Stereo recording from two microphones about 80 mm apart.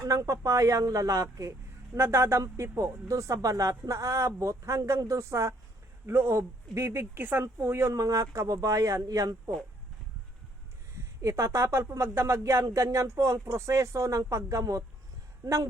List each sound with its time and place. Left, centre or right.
0.0 s speech: right
7.9 s speech: right
10.9 s speech: right